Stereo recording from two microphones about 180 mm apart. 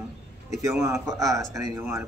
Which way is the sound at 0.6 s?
15° right (ahead or behind).